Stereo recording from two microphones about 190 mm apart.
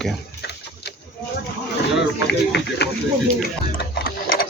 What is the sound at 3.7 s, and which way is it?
Sewing machine, 50° left (ahead or behind).